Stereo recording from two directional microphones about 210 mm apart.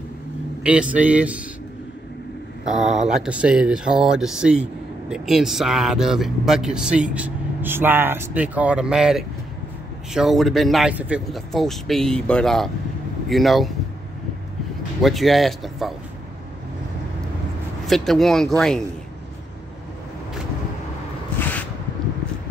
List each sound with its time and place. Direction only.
0.7 s speech: 5° right (ahead or behind)
2.6 s speech: centre (ahead or behind)
15.0 s speech: centre (ahead or behind)
17.8 s speech: centre (ahead or behind)
21.4 s a sound: 10° left (ahead or behind)